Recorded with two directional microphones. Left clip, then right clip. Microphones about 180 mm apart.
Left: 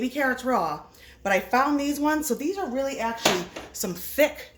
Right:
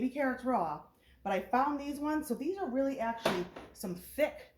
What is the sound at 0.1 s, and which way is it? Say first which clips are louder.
A woman's voice: left 11 dB; 35° left (ahead or behind).